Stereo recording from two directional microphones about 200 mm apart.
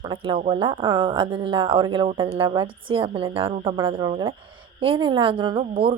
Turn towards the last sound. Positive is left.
turn(degrees=-25)  # may be behind; listen again after turning